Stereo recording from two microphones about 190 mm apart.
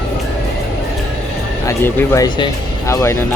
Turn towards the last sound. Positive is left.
turn(degrees=15)  # may be behind; listen again after turning